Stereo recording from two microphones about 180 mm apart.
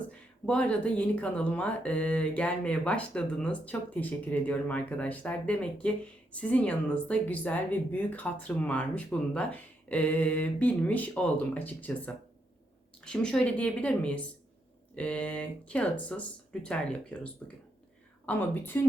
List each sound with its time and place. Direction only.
0.4 s speech: 5° left (ahead or behind)